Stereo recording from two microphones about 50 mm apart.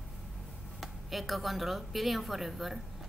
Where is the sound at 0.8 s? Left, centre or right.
Centre.